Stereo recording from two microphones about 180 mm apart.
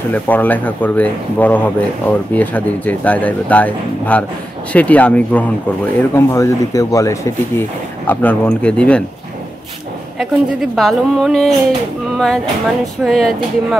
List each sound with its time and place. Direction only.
0.1 s speech: 10° left (ahead or behind)
10.1 s speech: centre (ahead or behind)
13.0 s speech: centre (ahead or behind)